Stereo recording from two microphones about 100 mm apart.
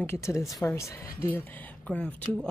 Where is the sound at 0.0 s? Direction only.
25° left (ahead or behind).